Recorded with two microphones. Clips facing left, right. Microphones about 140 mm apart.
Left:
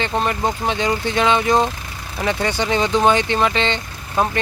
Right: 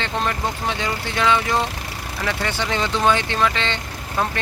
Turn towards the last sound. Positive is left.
turn(degrees=20)  # may be behind; listen again after turning